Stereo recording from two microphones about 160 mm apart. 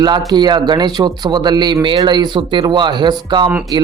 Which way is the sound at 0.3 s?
25° right (ahead or behind).